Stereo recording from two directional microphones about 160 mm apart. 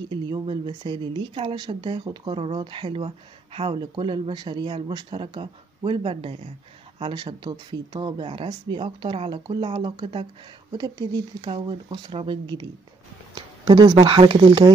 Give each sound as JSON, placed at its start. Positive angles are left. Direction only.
{"t": 0.1, "sound": "speech", "side_deg": -30}